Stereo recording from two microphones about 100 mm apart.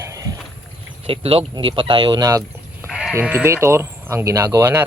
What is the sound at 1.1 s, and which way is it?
Speech, 75° right (ahead or behind).